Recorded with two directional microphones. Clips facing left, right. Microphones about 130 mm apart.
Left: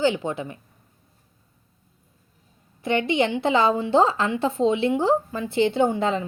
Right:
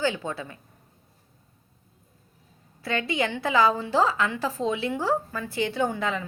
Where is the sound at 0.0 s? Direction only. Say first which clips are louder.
Left 5 dB; 20° left (ahead or behind).